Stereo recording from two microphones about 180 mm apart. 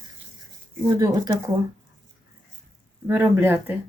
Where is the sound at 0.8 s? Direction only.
20° right (ahead or behind).